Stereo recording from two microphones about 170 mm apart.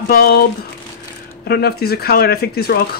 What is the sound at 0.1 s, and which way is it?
Speech, 65° left (ahead or behind).